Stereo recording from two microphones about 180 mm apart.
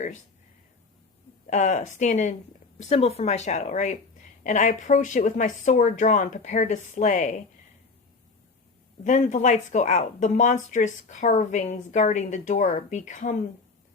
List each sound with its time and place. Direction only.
1.5 s speech: 40° left (ahead or behind)
9.0 s speech: 40° left (ahead or behind)